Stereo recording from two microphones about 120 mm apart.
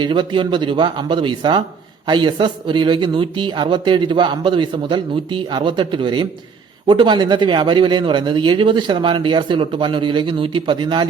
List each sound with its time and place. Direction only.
0.0 s speech: 40° right (ahead or behind)